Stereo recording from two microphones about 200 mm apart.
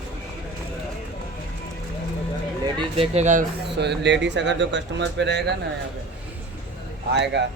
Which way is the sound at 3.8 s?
60° right (ahead or behind).